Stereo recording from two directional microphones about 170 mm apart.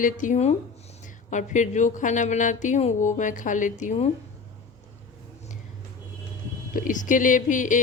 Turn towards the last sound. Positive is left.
turn(degrees=50)  # may be behind; listen again after turning